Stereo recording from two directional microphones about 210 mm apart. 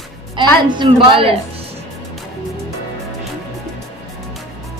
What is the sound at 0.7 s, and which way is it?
Speech, 20° right (ahead or behind).